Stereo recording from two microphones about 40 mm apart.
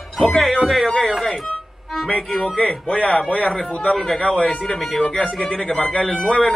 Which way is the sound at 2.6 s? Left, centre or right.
Left.